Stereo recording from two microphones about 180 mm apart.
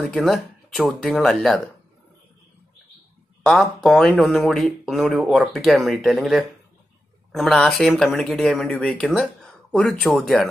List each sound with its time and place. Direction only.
0.0 s speech: centre (ahead or behind)
3.4 s speech: centre (ahead or behind)